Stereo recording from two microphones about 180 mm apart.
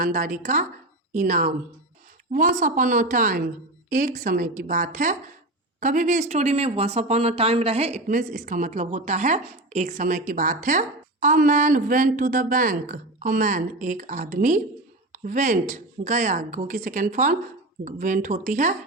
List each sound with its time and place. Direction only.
0.0 s speech: 50° right (ahead or behind)